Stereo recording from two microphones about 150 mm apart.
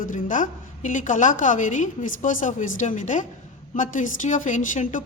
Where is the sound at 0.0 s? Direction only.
60° left (ahead or behind).